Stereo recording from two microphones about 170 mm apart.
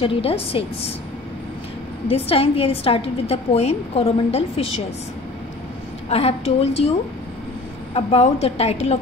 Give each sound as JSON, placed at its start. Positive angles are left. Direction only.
{"t": 0.0, "sound": "a woman's voice", "side_deg": 35}
{"t": 2.0, "sound": "a woman's voice", "side_deg": 35}
{"t": 6.0, "sound": "a woman's voice", "side_deg": 35}
{"t": 7.9, "sound": "a woman's voice", "side_deg": 35}